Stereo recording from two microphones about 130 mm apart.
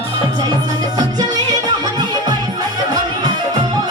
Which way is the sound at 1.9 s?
30° right (ahead or behind).